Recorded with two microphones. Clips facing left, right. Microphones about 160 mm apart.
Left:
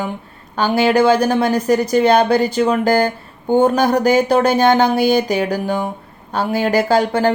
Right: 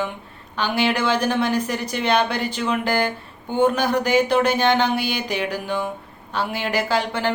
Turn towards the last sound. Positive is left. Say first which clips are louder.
# left 7 dB
turn(degrees=40)  # may be behind; listen again after turning